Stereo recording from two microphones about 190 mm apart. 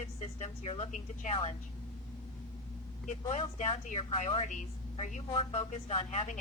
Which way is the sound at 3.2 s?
30° left (ahead or behind).